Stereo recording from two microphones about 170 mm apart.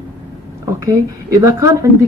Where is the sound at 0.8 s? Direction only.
20° right (ahead or behind).